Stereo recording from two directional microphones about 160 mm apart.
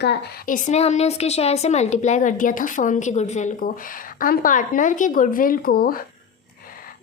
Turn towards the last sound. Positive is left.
turn(degrees=70)  # may be behind; listen again after turning